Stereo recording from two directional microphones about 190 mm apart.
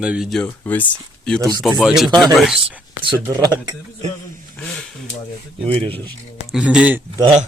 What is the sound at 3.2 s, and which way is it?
Speech, 15° right (ahead or behind).